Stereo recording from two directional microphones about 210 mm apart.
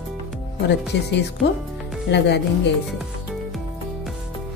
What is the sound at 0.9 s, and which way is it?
Speech, 55° left (ahead or behind).